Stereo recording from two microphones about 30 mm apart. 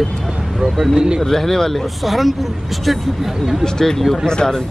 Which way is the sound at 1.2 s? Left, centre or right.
Centre.